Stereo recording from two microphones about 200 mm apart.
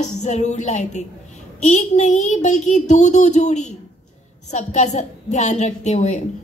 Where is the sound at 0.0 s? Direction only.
35° left (ahead or behind).